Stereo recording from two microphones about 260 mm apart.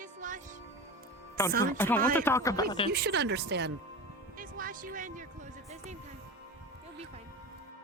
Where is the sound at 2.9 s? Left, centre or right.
Right.